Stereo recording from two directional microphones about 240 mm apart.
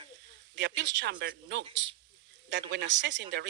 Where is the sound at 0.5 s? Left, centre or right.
Right.